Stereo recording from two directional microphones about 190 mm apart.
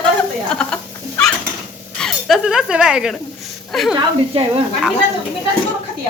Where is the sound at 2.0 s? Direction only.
Centre (ahead or behind).